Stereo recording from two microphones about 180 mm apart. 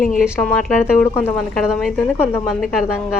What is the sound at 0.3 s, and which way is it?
Speech, centre (ahead or behind).